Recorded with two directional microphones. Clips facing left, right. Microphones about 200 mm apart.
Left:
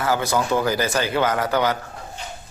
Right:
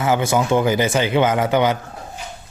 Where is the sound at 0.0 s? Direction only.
25° right (ahead or behind).